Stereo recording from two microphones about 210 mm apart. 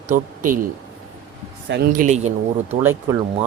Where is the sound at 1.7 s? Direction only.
50° right (ahead or behind).